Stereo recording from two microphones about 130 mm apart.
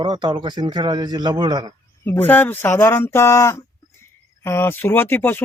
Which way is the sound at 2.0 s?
15° left (ahead or behind).